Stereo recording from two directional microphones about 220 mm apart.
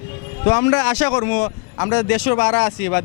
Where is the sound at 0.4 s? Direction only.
15° left (ahead or behind).